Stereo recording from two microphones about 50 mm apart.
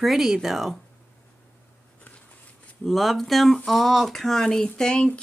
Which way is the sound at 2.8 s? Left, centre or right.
Centre.